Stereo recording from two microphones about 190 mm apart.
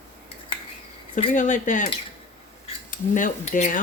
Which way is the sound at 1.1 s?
40° left (ahead or behind).